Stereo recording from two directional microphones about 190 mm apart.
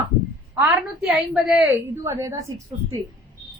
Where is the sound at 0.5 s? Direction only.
15° right (ahead or behind).